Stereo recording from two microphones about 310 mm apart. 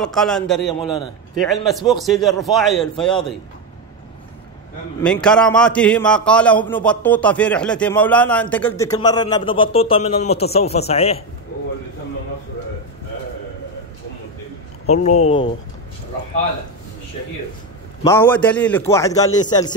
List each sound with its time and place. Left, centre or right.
0.0 s a man's voice: centre
5.0 s a man's voice: centre
14.9 s speech: left
18.0 s a man's voice: centre